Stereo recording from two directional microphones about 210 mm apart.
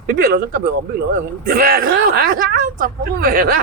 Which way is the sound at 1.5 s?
45° right (ahead or behind).